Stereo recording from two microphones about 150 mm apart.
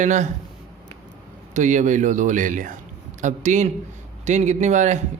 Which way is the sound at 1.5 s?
55° right (ahead or behind).